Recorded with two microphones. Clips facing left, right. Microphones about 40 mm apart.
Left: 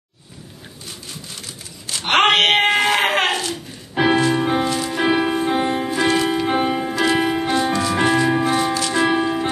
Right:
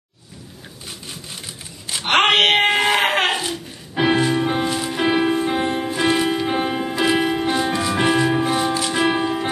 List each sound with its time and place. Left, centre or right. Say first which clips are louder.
2.0 s wail: even; centre
3.9 s music: left 1 dB; centre
6.8 s music: even; centre